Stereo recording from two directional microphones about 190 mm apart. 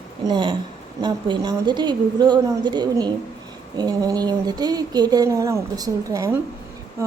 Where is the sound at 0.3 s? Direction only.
25° right (ahead or behind).